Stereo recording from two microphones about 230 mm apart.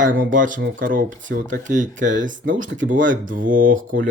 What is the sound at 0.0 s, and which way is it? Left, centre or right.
Speech, right.